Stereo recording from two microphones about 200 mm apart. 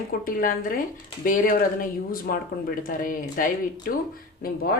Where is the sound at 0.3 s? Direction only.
45° left (ahead or behind).